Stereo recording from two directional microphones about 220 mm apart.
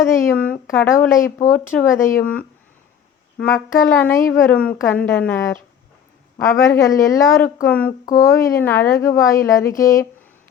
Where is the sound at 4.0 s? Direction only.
10° left (ahead or behind).